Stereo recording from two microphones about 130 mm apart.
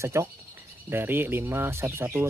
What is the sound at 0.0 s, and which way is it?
Speech, 20° right (ahead or behind).